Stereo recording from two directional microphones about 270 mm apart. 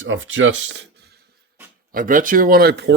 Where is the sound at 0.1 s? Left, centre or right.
Right.